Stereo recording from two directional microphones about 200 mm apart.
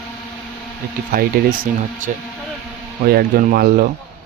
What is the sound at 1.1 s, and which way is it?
Speech, 45° right (ahead or behind).